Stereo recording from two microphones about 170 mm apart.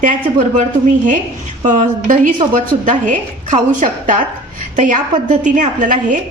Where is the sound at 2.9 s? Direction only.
45° right (ahead or behind).